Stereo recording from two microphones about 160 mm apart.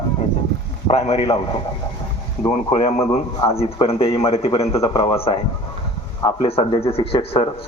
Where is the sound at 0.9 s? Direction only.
45° left (ahead or behind).